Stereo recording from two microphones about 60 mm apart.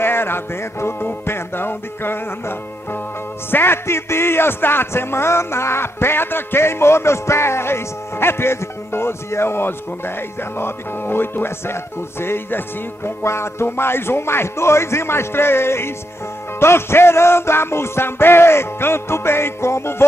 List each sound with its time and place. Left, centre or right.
0.0 s music: left
3.4 s a man's voice: left
10.6 s music: left
13.2 s a man's voice: left